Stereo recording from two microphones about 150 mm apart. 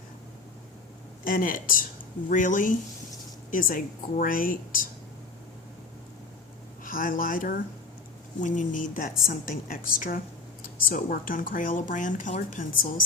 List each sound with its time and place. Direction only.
1.2 s a woman's voice: 70° left (ahead or behind)
6.8 s speech: 70° left (ahead or behind)
8.4 s speech: 55° left (ahead or behind)